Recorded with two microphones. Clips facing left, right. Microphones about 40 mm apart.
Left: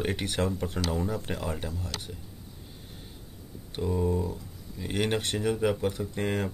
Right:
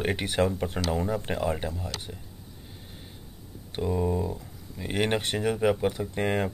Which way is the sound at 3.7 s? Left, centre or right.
Centre.